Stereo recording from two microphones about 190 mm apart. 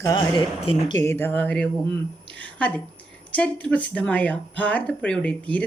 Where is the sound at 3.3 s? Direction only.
5° left (ahead or behind).